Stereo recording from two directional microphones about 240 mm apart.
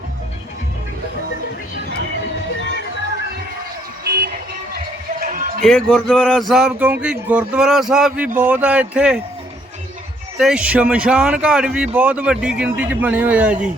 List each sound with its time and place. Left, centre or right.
4.0 s vehicle: right
5.2 s music: right
5.6 s speech: centre
10.3 s speech: centre